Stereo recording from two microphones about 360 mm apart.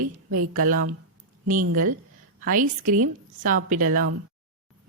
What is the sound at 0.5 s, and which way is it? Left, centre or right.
Speech, right.